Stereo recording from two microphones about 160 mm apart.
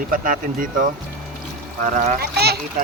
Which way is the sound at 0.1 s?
60° right (ahead or behind).